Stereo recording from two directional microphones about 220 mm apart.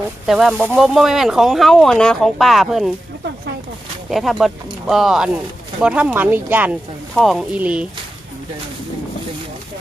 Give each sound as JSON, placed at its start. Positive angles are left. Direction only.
{"t": 0.3, "sound": "speech", "side_deg": 0}
{"t": 4.1, "sound": "speech", "side_deg": 0}